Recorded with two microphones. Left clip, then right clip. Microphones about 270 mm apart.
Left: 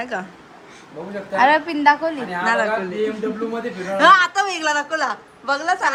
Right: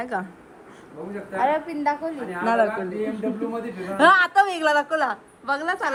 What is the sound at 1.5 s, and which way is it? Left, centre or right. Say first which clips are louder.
Speech: left 8 dB; left.